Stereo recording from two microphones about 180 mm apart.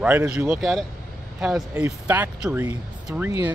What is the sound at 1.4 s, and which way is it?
Speech, 5° right (ahead or behind).